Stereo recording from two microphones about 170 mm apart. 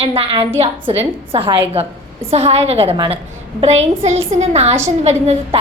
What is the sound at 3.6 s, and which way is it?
A woman's voice, 40° right (ahead or behind).